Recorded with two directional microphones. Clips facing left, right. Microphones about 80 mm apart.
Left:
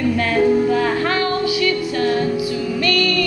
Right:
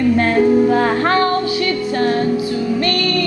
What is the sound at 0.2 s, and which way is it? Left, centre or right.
Music, right.